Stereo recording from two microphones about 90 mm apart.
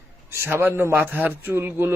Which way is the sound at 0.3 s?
25° right (ahead or behind).